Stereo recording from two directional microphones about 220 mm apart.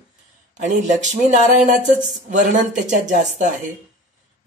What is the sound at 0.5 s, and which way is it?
Speech, 35° right (ahead or behind).